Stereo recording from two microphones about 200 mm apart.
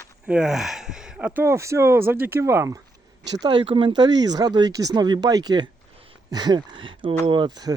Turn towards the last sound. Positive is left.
turn(degrees=-20)  # may be behind; listen again after turning